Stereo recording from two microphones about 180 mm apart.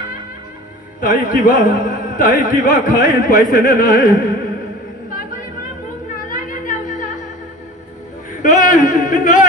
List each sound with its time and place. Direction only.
1.0 s a man's voice: 45° left (ahead or behind)
6.2 s music: 50° left (ahead or behind)
8.4 s a sound: 45° left (ahead or behind)